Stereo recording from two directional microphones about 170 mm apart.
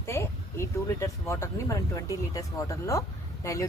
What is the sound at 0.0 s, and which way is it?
Speech, 15° left (ahead or behind).